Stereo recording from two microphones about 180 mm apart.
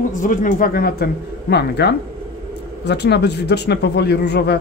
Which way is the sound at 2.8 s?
70° left (ahead or behind).